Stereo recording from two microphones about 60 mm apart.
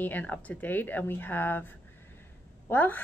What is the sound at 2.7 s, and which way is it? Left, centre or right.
Speech, left.